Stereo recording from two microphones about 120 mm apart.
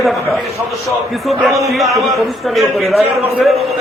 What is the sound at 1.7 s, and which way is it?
A man's voice, centre (ahead or behind).